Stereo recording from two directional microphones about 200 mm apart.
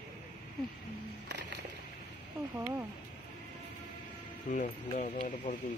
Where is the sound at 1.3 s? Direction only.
60° right (ahead or behind).